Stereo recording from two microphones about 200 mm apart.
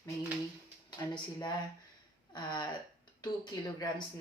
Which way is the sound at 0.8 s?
20° left (ahead or behind).